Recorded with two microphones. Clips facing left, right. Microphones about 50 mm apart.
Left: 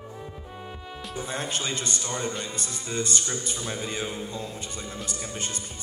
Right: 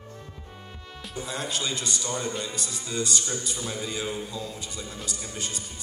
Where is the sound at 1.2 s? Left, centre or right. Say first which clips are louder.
Even; left.